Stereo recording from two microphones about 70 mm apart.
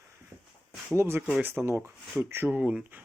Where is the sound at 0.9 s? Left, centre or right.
Right.